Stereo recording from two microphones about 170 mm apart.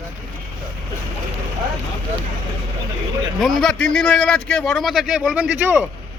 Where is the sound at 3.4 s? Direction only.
Centre (ahead or behind).